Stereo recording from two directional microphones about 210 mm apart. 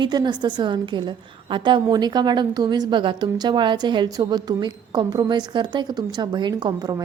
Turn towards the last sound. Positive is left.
turn(degrees=-20)  # may be behind; listen again after turning